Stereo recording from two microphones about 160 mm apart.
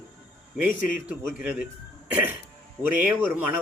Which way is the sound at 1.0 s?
10° right (ahead or behind).